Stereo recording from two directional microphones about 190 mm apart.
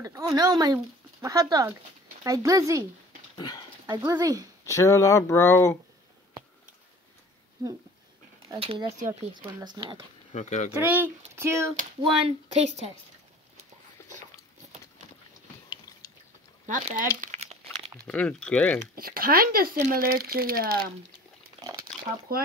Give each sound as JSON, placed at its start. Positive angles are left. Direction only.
{"t": 0.0, "sound": "speech", "side_deg": -15}
{"t": 3.3, "sound": "speech", "side_deg": 20}
{"t": 3.9, "sound": "speech", "side_deg": -20}
{"t": 4.6, "sound": "speech", "side_deg": 15}
{"t": 8.5, "sound": "speech", "side_deg": -30}
{"t": 10.3, "sound": "speech", "side_deg": 40}
{"t": 10.7, "sound": "speech", "side_deg": -10}
{"t": 12.5, "sound": "a woman's voice", "side_deg": -35}
{"t": 16.6, "sound": "speech", "side_deg": -45}
{"t": 17.2, "sound": "crumpling", "side_deg": -35}
{"t": 18.0, "sound": "speech", "side_deg": 5}
{"t": 18.9, "sound": "speech", "side_deg": -50}
{"t": 22.3, "sound": "speech", "side_deg": -50}